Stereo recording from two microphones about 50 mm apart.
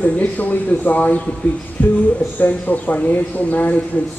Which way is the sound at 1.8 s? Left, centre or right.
Left.